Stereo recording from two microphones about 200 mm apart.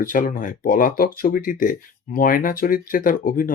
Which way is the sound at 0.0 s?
45° left (ahead or behind).